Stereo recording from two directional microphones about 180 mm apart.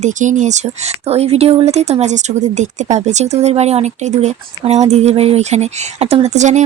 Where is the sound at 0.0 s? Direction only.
45° right (ahead or behind).